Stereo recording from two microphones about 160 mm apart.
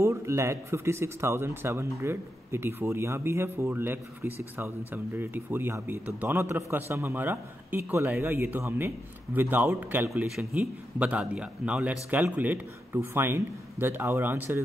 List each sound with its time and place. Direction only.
0.0 s speech: 20° right (ahead or behind)